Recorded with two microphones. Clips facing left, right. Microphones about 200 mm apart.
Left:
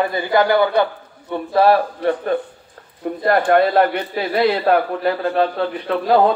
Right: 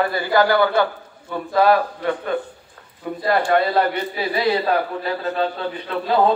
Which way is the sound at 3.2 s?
55° left (ahead or behind).